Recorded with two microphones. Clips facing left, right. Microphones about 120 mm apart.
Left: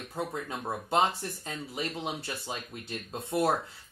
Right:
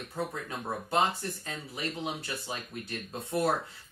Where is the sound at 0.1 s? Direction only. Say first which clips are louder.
Left 1 dB; 25° left (ahead or behind).